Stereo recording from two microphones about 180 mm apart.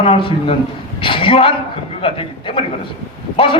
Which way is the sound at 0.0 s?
30° left (ahead or behind).